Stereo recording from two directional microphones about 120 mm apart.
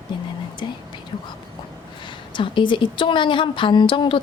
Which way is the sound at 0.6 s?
40° left (ahead or behind).